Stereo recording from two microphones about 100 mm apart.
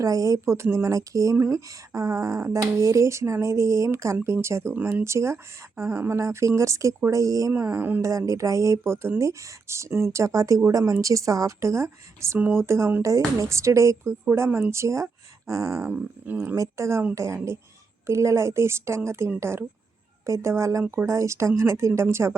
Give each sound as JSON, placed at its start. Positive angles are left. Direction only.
{"t": 0.0, "sound": "speech", "side_deg": -35}
{"t": 7.5, "sound": "speech", "side_deg": -20}
{"t": 8.0, "sound": "speech", "side_deg": -30}
{"t": 15.9, "sound": "speech", "side_deg": -15}
{"t": 16.6, "sound": "speech", "side_deg": -30}